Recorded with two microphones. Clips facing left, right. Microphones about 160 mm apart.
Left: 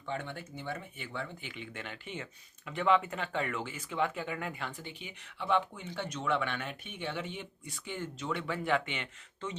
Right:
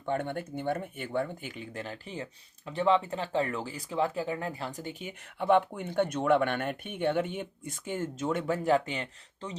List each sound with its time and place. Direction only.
0.0 s speech: 50° right (ahead or behind)